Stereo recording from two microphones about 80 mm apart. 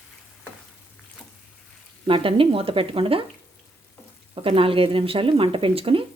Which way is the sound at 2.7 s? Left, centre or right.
Right.